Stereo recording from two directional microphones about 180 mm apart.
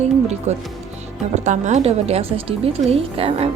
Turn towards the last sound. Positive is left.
turn(degrees=-30)  # may be behind; listen again after turning